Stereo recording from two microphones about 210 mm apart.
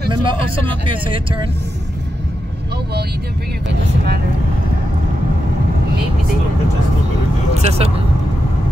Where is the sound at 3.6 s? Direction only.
50° right (ahead or behind).